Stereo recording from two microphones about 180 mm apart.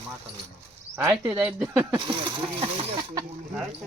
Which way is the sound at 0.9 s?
15° right (ahead or behind).